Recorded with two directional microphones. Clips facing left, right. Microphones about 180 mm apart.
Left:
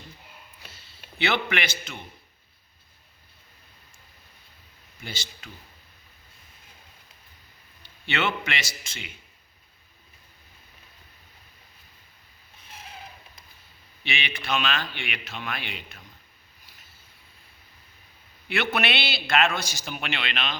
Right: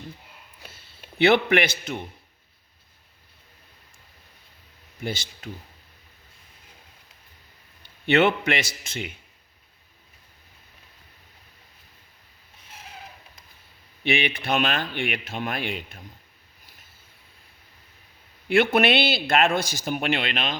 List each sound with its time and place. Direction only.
0.6 s a sound: 50° right (ahead or behind)
5.0 s speech: 55° right (ahead or behind)
7.8 s a man's voice: 55° right (ahead or behind)
14.0 s speech: 55° right (ahead or behind)
18.4 s speech: 45° right (ahead or behind)